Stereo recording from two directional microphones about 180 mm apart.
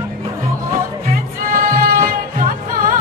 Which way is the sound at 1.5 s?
50° right (ahead or behind).